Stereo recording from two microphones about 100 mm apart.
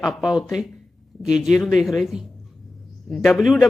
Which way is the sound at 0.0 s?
Centre (ahead or behind).